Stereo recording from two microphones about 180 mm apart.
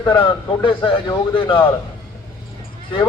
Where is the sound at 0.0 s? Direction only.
25° left (ahead or behind).